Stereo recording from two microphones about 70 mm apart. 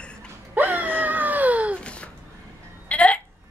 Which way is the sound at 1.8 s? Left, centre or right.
Centre.